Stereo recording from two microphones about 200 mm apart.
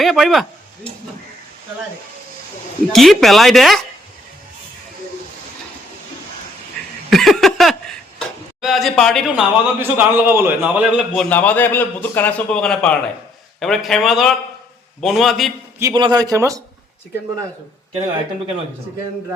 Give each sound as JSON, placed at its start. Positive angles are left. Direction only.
{"t": 0.0, "sound": "speech", "side_deg": 0}
{"t": 2.9, "sound": "speech", "side_deg": 0}
{"t": 7.1, "sound": "a sound", "side_deg": 0}
{"t": 8.6, "sound": "speech", "side_deg": 0}
{"t": 15.8, "sound": "speech", "side_deg": -20}